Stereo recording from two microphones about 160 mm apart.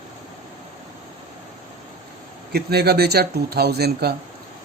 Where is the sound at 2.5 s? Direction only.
85° right.